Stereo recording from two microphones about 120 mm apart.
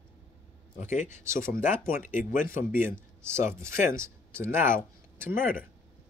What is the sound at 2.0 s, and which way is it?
Speech, 90° left.